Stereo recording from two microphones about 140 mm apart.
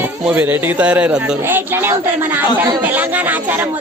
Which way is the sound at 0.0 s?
15° right (ahead or behind).